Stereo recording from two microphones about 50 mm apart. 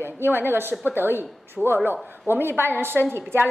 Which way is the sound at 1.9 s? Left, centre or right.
Right.